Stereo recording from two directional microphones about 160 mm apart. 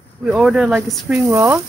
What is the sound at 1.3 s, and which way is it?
Speech, 20° right (ahead or behind).